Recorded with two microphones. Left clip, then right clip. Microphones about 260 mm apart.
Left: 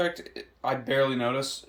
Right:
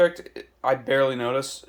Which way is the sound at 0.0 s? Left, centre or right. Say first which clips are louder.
Right 8 dB; centre.